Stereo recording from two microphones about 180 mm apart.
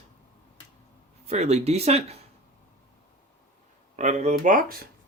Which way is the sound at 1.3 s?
35° right (ahead or behind).